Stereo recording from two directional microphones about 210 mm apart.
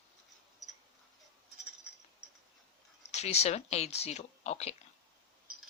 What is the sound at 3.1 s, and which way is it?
Speech, 30° left (ahead or behind).